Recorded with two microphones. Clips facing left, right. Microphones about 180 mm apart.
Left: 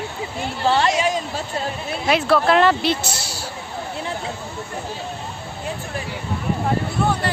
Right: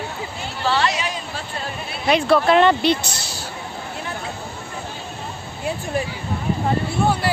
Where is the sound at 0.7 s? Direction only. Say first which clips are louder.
Left 4 dB; 45° left (ahead or behind).